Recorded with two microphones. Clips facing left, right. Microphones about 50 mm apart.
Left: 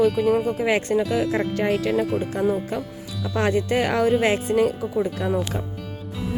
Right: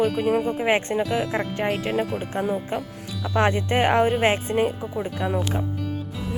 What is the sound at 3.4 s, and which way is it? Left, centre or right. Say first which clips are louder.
Speech: even; right.